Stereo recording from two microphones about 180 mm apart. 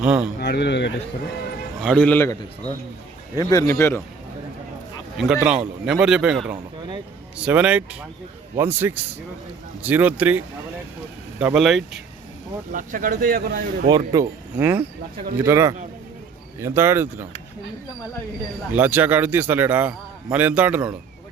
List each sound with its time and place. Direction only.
0.0 s a man's voice: 5° right (ahead or behind)
0.3 s speech: 65° left (ahead or behind)
1.8 s speech: 5° left (ahead or behind)
5.1 s a man's voice: 5° right (ahead or behind)
12.7 s speech: 50° right (ahead or behind)
13.9 s speech: 20° right (ahead or behind)
18.7 s speech: 10° right (ahead or behind)